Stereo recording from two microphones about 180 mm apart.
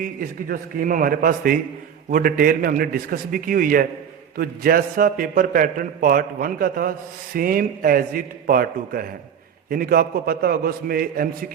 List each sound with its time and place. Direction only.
0.0 s a man's voice: 50° right (ahead or behind)